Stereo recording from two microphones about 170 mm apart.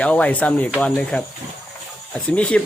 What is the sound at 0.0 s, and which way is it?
Speech, 5° left (ahead or behind).